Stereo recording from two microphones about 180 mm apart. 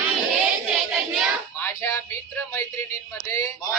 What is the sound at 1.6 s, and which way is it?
Music, 15° left (ahead or behind).